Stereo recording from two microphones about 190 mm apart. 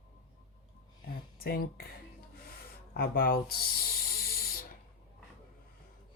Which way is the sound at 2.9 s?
50° left (ahead or behind).